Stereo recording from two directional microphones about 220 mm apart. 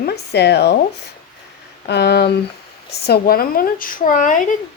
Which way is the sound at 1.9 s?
50° left (ahead or behind).